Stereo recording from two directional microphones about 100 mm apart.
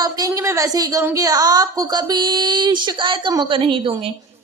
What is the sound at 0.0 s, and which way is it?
A woman's voice, 35° right (ahead or behind).